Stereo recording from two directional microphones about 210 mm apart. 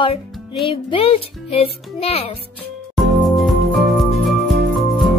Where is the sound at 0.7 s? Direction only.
25° left (ahead or behind).